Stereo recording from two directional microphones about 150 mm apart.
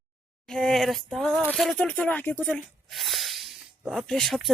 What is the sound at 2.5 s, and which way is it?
Speech, centre (ahead or behind).